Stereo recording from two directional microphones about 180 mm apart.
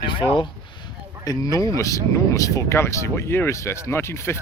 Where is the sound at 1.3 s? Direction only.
20° left (ahead or behind).